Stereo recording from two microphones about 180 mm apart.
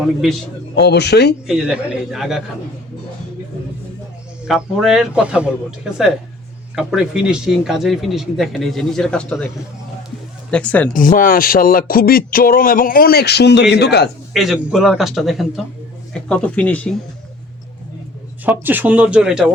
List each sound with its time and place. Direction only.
0.0 s a man's voice: centre (ahead or behind)
0.8 s speech: 65° left (ahead or behind)
1.5 s a man's voice: 5° right (ahead or behind)
4.4 s a man's voice: centre (ahead or behind)
10.5 s speech: 5° left (ahead or behind)
10.9 s a sound: 50° left (ahead or behind); by 14.1 s 65° left (ahead or behind)
14.3 s a man's voice: centre (ahead or behind)
18.4 s speech: 10° right (ahead or behind)